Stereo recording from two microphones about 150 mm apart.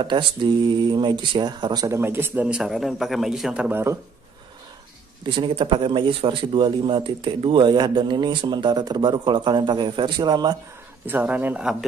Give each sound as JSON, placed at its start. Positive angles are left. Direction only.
{"t": 0.0, "sound": "speech", "side_deg": -30}
{"t": 2.0, "sound": "a man's voice", "side_deg": -15}
{"t": 5.2, "sound": "speech", "side_deg": -35}
{"t": 11.1, "sound": "speech", "side_deg": -10}